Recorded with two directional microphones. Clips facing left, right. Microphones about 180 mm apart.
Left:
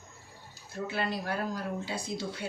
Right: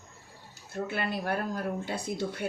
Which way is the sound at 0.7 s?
55° right (ahead or behind).